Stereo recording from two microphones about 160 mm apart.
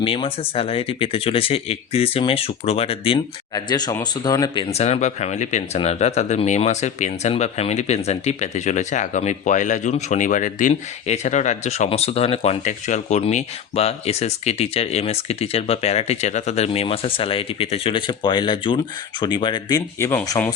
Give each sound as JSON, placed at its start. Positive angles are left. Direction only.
{"t": 0.0, "sound": "speech", "side_deg": 35}
{"t": 4.7, "sound": "speech", "side_deg": 45}